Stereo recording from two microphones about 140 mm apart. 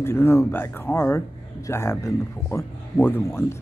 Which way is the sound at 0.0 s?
15° left (ahead or behind).